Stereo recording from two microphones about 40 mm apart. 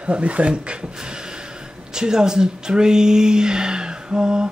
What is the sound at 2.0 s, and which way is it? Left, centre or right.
Speech, centre.